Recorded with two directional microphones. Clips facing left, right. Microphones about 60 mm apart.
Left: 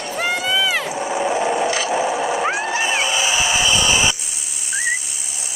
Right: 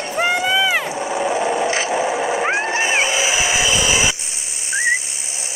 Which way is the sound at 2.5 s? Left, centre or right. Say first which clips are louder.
Right 2 dB; right.